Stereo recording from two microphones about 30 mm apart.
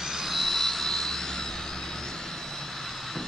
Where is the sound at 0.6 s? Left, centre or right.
Centre.